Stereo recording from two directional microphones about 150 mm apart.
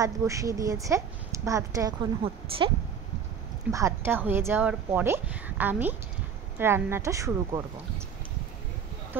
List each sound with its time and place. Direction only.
0.0 s speech: 20° right (ahead or behind)
2.2 s speech: 35° right (ahead or behind)
3.7 s speech: 20° right (ahead or behind)
9.1 s speech: 15° right (ahead or behind)